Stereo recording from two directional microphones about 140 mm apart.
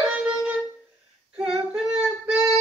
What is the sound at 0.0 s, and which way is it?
Music, 10° right (ahead or behind).